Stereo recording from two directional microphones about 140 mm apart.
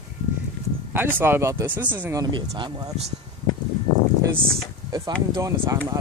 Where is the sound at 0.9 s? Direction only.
15° right (ahead or behind).